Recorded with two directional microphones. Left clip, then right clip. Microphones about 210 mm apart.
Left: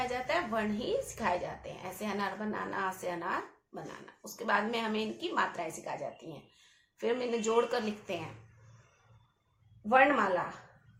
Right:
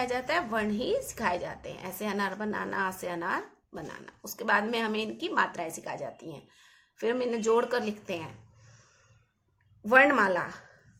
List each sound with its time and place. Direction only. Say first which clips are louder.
0.0 s a woman's voice: right 3 dB; 50° right (ahead or behind)
9.8 s a woman's voice: right 4 dB; 55° right (ahead or behind)